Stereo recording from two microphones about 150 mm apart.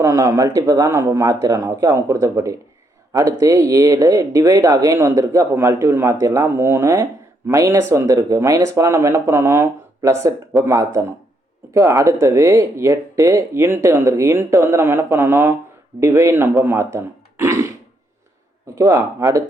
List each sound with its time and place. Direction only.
0.0 s speech: 20° right (ahead or behind)
18.7 s speech: 20° right (ahead or behind)